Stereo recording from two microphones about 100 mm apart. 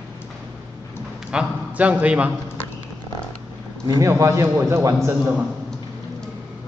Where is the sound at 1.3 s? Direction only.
10° right (ahead or behind).